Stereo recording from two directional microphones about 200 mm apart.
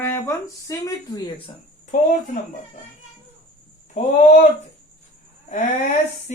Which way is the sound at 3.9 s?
35° left (ahead or behind).